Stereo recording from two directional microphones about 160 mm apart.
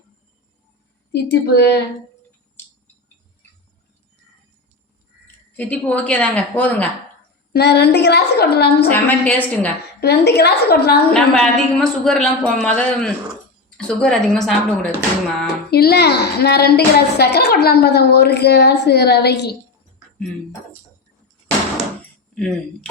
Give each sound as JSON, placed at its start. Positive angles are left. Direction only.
{"t": 1.1, "sound": "a woman's voice", "side_deg": 90}
{"t": 5.5, "sound": "a woman's voice", "side_deg": 10}
{"t": 7.5, "sound": "a woman's voice", "side_deg": 90}
{"t": 8.9, "sound": "a woman's voice", "side_deg": 10}
{"t": 10.0, "sound": "a woman's voice", "side_deg": 90}
{"t": 11.1, "sound": "a woman's voice", "side_deg": 5}
{"t": 15.7, "sound": "a woman's voice", "side_deg": 80}
{"t": 22.4, "sound": "a woman's voice", "side_deg": 5}